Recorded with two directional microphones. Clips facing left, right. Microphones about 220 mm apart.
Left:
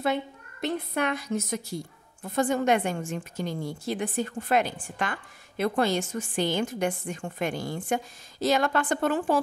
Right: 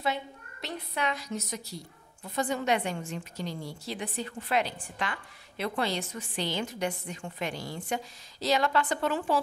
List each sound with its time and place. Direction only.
0.0 s a woman's voice: 50° left (ahead or behind)